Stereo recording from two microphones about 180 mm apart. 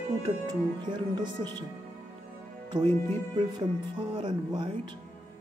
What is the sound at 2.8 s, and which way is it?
Speech, 15° left (ahead or behind).